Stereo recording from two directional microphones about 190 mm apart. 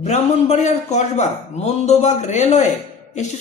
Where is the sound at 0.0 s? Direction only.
35° left (ahead or behind).